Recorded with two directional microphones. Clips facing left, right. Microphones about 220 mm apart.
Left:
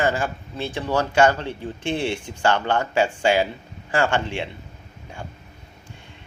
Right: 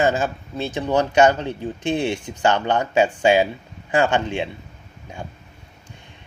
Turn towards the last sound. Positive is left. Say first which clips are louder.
# right 3 dB
turn(degrees=-15)  # may be behind; listen again after turning